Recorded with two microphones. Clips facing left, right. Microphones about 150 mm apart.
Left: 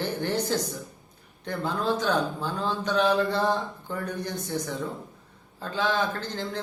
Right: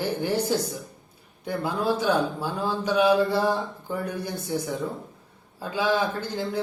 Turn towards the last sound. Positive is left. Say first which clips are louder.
# right 3 dB
turn(degrees=-10)  # may be behind; listen again after turning